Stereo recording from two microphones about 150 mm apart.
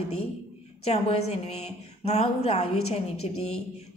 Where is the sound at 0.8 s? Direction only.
45° left (ahead or behind).